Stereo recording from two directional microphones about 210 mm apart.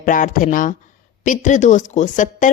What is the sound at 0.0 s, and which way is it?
A woman's voice, 40° left (ahead or behind).